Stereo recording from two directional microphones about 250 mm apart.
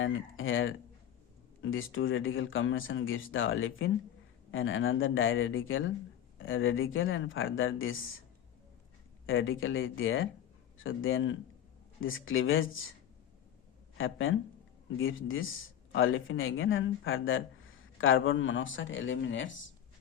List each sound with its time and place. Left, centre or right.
0.0 s speech: left
9.2 s speech: left
14.0 s speech: left